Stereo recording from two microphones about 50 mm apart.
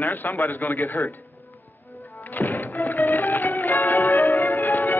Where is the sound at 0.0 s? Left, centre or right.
Left.